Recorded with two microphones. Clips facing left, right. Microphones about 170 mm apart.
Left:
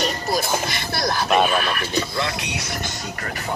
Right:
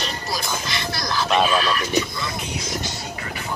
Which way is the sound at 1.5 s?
55° left (ahead or behind).